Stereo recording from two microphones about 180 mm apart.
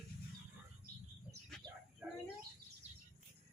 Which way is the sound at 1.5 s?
5° left (ahead or behind).